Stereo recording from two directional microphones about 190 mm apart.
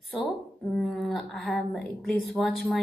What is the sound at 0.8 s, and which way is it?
A woman's voice, centre (ahead or behind).